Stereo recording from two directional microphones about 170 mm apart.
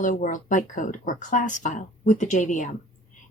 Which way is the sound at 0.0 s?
50° left (ahead or behind).